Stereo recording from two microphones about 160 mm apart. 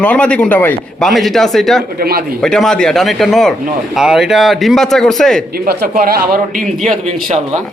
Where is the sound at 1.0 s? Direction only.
Centre (ahead or behind).